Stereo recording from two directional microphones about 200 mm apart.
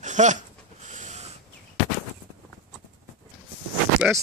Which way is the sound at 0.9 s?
35° right (ahead or behind).